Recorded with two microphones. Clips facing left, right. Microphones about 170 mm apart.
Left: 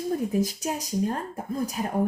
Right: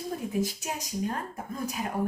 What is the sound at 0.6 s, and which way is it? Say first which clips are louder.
Speech: left 5 dB; 35° left (ahead or behind).